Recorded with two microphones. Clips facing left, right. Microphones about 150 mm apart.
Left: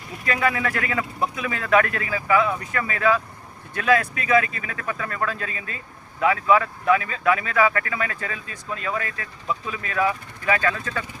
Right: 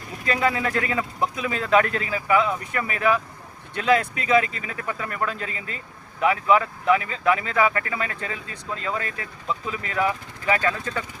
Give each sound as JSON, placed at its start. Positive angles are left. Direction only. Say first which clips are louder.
{"t": 0.3, "sound": "speech", "louder": "even", "side_deg": -25}